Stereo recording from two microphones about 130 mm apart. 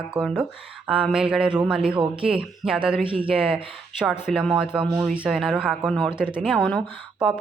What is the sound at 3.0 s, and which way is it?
Speech, 45° right (ahead or behind).